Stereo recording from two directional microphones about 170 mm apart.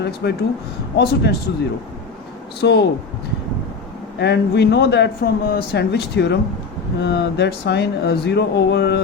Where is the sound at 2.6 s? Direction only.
80° left.